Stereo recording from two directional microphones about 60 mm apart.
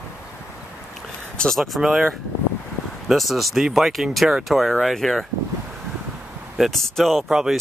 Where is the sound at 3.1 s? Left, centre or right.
Centre.